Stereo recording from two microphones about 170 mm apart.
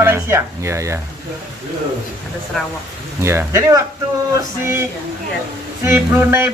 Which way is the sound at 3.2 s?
15° right (ahead or behind).